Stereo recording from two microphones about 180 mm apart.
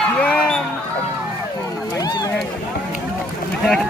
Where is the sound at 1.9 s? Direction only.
20° left (ahead or behind).